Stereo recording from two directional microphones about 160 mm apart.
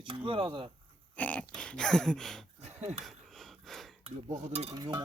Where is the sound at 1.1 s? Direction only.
10° left (ahead or behind).